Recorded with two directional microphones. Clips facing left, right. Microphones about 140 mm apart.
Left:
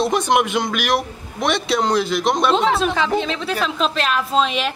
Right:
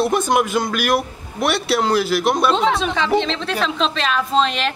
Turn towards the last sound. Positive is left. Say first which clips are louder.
# right 1 dB
turn(degrees=5)  # may be behind; listen again after turning